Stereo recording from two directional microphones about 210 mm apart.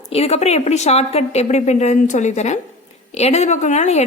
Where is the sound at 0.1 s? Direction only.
30° left (ahead or behind).